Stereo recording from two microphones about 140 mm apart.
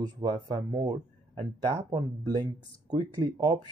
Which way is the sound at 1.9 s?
30° right (ahead or behind).